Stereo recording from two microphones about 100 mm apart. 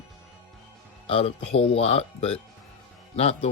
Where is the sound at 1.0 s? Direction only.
80° left.